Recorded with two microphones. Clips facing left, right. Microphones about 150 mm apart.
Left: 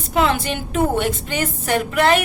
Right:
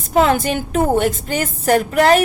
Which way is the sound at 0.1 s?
40° right (ahead or behind).